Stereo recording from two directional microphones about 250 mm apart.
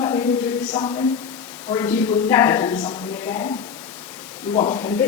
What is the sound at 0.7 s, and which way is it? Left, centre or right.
A woman's voice, centre.